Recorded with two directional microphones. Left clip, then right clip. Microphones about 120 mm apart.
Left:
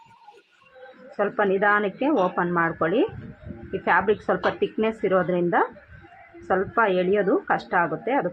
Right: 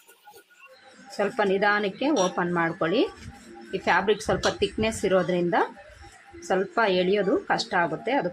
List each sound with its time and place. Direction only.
1.2 s a woman's voice: 20° right (ahead or behind)